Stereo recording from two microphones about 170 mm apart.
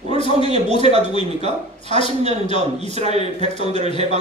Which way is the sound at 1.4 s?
40° right (ahead or behind).